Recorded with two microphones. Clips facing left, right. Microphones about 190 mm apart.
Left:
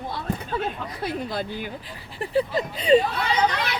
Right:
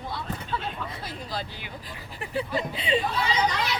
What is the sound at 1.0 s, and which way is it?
Speech, 55° left (ahead or behind).